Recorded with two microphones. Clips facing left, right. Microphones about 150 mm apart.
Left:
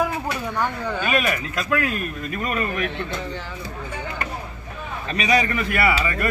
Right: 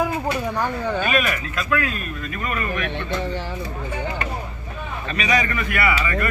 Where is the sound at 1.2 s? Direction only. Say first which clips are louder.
Left 1 dB; 35° left (ahead or behind).